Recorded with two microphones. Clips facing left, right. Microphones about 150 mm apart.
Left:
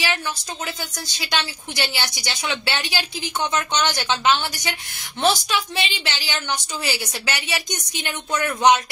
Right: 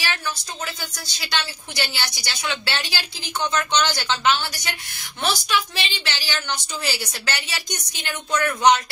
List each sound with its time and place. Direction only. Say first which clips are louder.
1.0 s a woman's voice: left 2 dB; 15° left (ahead or behind)